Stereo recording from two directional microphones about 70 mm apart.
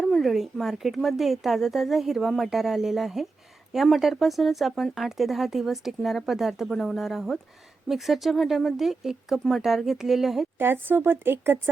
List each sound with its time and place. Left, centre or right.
0.0 s speech: centre
10.6 s speech: right